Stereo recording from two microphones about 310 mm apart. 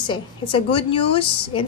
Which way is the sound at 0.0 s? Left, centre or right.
Centre.